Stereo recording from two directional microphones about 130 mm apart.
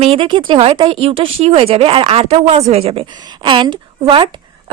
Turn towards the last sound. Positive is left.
turn(degrees=-40)  # may be behind; listen again after turning